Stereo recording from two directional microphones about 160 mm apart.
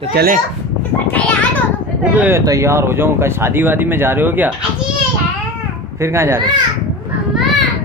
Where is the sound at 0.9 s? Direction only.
10° left (ahead or behind).